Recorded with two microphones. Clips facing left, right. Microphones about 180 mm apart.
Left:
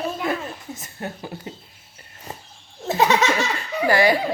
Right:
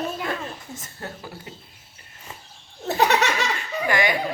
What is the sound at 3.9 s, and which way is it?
Speech, 35° left (ahead or behind).